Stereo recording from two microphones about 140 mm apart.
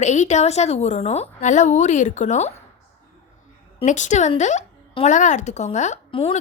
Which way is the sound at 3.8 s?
60° left (ahead or behind).